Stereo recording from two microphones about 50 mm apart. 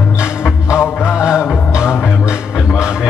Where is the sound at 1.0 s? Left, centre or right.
Centre.